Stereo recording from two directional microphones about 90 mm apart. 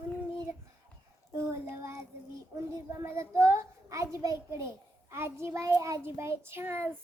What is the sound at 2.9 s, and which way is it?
A child's voice, 30° right (ahead or behind).